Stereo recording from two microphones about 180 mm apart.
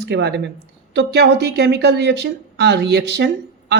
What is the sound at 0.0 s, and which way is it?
Speech, 70° right (ahead or behind).